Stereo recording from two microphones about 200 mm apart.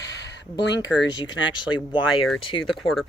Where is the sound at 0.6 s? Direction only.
60° left (ahead or behind).